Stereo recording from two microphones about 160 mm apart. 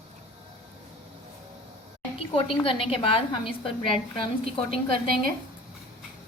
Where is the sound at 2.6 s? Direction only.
35° left (ahead or behind).